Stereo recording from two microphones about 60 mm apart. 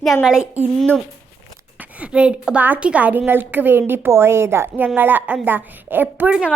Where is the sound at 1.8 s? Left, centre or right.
Right.